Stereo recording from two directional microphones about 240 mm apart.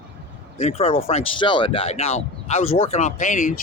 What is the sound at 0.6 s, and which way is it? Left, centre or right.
Speech, left.